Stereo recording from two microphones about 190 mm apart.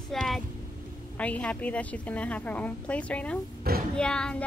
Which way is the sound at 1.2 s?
5° left (ahead or behind).